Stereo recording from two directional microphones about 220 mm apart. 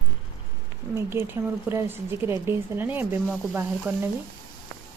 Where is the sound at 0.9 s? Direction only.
10° right (ahead or behind).